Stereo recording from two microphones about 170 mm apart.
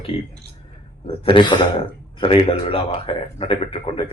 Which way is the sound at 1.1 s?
30° left (ahead or behind).